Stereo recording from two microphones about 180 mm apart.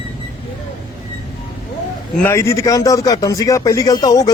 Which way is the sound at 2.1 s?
15° left (ahead or behind).